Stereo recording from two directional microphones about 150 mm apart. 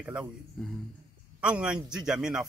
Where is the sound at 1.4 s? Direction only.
5° right (ahead or behind).